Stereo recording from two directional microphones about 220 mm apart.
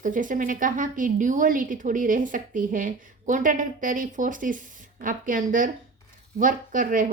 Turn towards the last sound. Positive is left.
turn(degrees=-35)  # may be behind; listen again after turning